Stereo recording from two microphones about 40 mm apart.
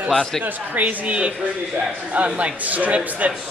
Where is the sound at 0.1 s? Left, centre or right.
Centre.